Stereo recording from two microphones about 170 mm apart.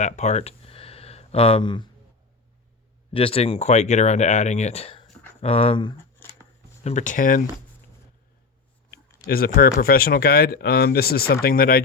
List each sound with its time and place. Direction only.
0.0 s a sound: 40° left (ahead or behind)
3.1 s speech: 35° left (ahead or behind)
6.8 s speech: 45° left (ahead or behind)
9.2 s speech: 60° left (ahead or behind)